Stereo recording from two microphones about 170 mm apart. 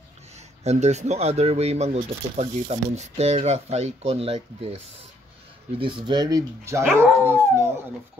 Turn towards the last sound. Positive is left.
turn(degrees=-15)  # may be behind; listen again after turning